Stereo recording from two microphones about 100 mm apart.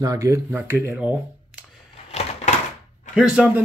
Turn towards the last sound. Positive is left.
turn(degrees=-10)  # may be behind; listen again after turning